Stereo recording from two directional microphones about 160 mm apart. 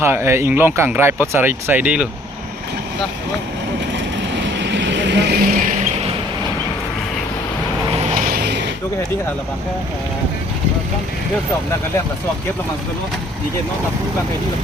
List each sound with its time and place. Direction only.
0.0 s speech: 15° right (ahead or behind)
4.5 s vehicle: 90° right
8.1 s a sound: 65° right (ahead or behind); by 8.6 s 90° right